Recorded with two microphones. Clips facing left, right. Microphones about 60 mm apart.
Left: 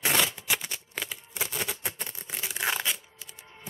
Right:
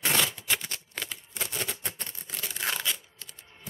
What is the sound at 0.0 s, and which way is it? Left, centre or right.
Shuffling cards, centre.